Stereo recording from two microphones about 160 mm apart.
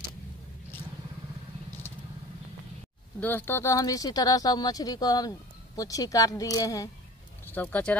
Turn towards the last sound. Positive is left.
turn(degrees=10)  # may be behind; listen again after turning